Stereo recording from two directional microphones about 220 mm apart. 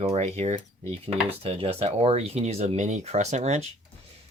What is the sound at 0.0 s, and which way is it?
Speech, 30° right (ahead or behind).